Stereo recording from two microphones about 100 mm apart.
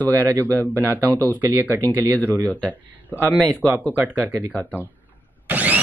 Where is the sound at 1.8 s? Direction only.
20° left (ahead or behind).